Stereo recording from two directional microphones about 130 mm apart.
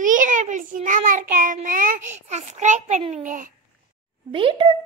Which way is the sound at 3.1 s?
85° right.